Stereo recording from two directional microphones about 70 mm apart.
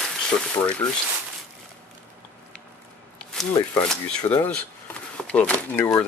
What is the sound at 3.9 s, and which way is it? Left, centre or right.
Speech, centre.